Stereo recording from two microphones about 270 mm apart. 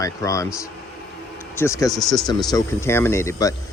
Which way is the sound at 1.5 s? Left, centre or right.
Centre.